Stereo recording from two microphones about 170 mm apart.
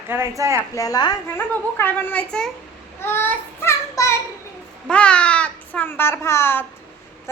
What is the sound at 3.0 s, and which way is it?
Child singing, 10° left (ahead or behind).